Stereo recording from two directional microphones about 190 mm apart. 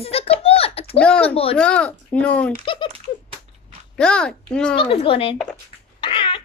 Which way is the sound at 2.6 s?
25° left (ahead or behind).